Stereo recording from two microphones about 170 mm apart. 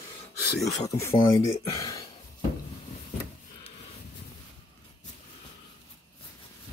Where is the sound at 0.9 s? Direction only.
20° left (ahead or behind).